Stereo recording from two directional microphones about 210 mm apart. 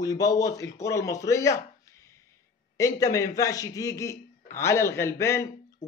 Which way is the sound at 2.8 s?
15° left (ahead or behind).